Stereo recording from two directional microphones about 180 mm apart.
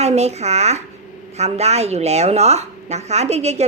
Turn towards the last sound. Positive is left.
turn(degrees=-35)  # may be behind; listen again after turning